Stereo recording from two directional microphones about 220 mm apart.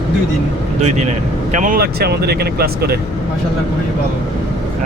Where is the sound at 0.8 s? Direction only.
30° right (ahead or behind).